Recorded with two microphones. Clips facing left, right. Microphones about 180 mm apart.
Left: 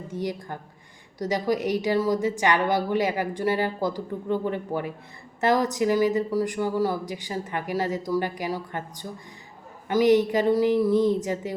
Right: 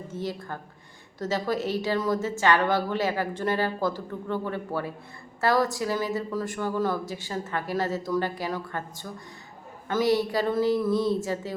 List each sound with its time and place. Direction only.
0.1 s speech: 15° left (ahead or behind)